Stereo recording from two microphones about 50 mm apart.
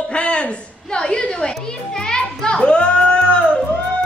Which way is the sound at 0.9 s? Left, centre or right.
Centre.